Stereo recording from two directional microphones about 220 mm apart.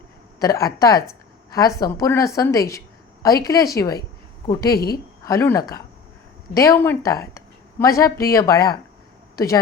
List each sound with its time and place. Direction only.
0.3 s a woman's voice: 15° left (ahead or behind)